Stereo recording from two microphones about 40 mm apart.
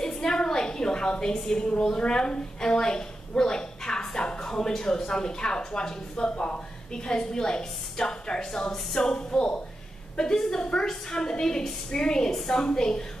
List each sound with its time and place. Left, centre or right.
0.0 s a sound: centre
4.5 s speech: centre; by 9.6 s left
10.1 s a woman's voice: centre